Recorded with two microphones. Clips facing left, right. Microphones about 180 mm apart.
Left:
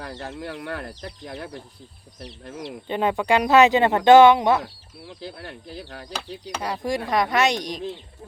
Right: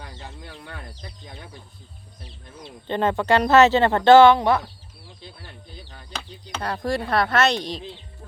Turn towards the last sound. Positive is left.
turn(degrees=15)  # may be behind; listen again after turning